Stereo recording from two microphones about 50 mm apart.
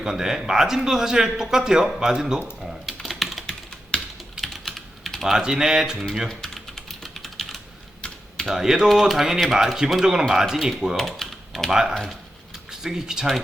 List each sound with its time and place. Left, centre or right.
0.0 s a man's voice: centre
2.6 s typing: centre
6.2 s typing: centre
8.0 s typing: centre
8.4 s a man's voice: centre
10.9 s typing: centre
11.7 s a man's voice: centre